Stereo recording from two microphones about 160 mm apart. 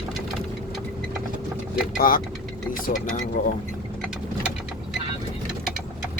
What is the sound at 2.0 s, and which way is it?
Speech, 60° left (ahead or behind).